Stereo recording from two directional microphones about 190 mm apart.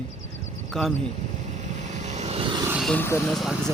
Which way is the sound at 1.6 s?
40° right (ahead or behind).